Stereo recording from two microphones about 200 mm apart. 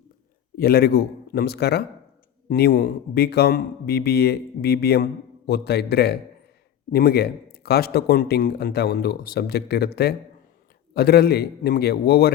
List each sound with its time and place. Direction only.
0.5 s a man's voice: 50° left (ahead or behind)